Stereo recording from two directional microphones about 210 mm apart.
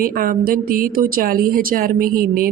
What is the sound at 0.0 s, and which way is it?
Speech, 45° right (ahead or behind).